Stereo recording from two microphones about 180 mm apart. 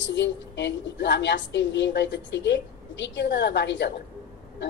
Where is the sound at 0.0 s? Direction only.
75° left (ahead or behind).